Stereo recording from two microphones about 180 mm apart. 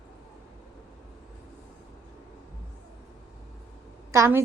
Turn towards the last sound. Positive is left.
turn(degrees=-15)  # may be behind; listen again after turning